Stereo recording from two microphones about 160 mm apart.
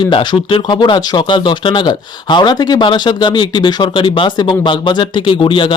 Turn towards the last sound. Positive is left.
turn(degrees=30)  # may be behind; listen again after turning